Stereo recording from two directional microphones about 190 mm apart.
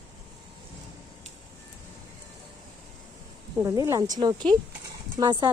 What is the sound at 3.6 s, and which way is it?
Speech, 15° right (ahead or behind).